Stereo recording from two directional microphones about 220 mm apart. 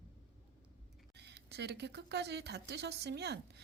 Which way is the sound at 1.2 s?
50° right (ahead or behind).